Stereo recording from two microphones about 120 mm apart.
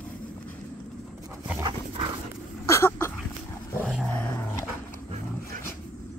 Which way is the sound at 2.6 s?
20° left (ahead or behind).